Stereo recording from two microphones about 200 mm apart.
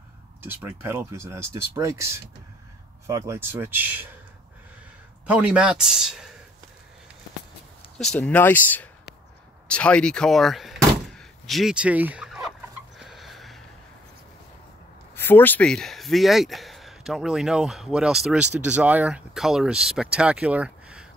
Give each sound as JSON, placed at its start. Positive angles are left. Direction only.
{"t": 0.4, "sound": "speech", "side_deg": -10}
{"t": 3.1, "sound": "speech", "side_deg": -15}
{"t": 5.2, "sound": "speech", "side_deg": -5}
{"t": 8.0, "sound": "speech", "side_deg": 5}
{"t": 9.7, "sound": "gunshot", "side_deg": 5}
{"t": 15.1, "sound": "speech", "side_deg": 10}